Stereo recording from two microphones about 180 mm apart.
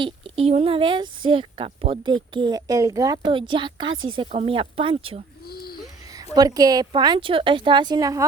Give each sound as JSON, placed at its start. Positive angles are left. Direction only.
{"t": 0.0, "sound": "speech", "side_deg": -35}
{"t": 5.5, "sound": "a sound", "side_deg": 60}
{"t": 6.3, "sound": "speech", "side_deg": -20}